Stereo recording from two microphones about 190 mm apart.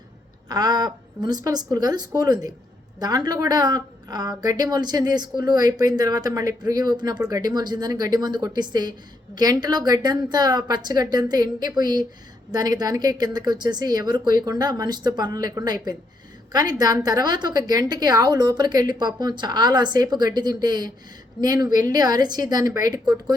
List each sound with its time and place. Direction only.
0.4 s a woman's voice: 20° right (ahead or behind)